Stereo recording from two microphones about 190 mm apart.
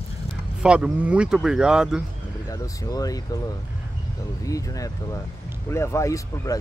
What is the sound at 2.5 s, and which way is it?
Speech, 20° left (ahead or behind).